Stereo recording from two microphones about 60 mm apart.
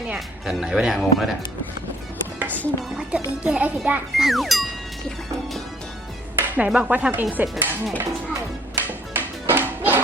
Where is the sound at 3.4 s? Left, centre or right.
Centre.